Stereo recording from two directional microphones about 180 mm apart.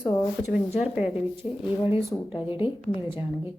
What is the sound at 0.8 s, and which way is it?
Speech, 5° right (ahead or behind).